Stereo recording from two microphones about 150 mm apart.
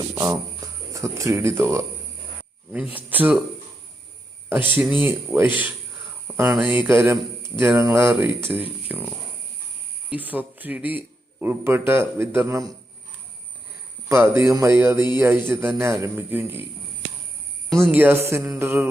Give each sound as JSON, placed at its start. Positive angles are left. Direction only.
{"t": 0.1, "sound": "speech", "side_deg": -25}
{"t": 4.8, "sound": "speech", "side_deg": -10}
{"t": 6.3, "sound": "speech", "side_deg": -25}
{"t": 6.6, "sound": "speech", "side_deg": -5}
{"t": 14.1, "sound": "speech", "side_deg": -15}
{"t": 17.8, "sound": "speech", "side_deg": -10}